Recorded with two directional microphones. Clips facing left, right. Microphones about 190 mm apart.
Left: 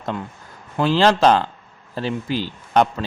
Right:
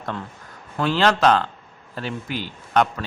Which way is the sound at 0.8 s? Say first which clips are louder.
Left 3 dB; 30° left (ahead or behind).